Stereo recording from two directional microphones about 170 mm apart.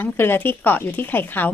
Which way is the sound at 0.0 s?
10° left (ahead or behind).